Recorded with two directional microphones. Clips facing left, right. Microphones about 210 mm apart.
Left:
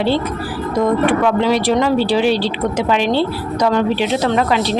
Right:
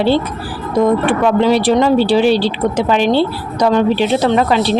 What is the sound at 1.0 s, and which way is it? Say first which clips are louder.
Speech: right 2 dB; 30° right (ahead or behind).